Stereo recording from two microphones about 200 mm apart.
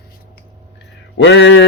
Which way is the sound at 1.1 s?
65° left (ahead or behind).